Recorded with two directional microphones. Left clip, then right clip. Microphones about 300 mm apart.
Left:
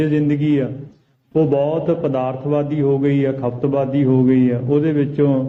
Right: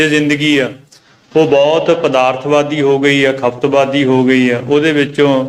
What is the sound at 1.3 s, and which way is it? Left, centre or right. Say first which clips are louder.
Speech: right 8 dB; right.